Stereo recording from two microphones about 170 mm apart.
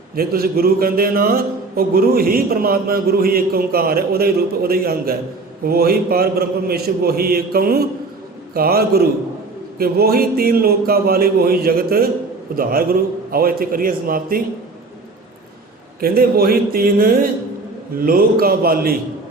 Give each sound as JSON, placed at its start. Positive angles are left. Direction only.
{"t": 0.2, "sound": "speech", "side_deg": -65}
{"t": 16.0, "sound": "speech", "side_deg": -60}